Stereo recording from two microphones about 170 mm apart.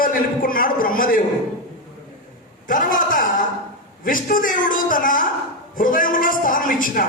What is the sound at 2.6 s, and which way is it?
A man's voice, 55° left (ahead or behind).